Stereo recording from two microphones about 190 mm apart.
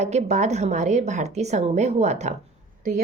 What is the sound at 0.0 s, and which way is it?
A woman's voice, 35° right (ahead or behind).